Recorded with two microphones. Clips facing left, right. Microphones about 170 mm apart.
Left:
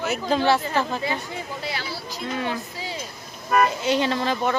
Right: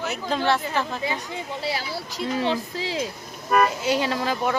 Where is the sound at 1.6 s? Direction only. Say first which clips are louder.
Right 5 dB; 35° right (ahead or behind).